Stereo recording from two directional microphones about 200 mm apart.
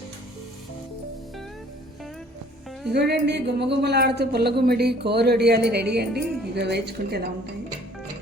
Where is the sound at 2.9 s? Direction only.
55° right (ahead or behind).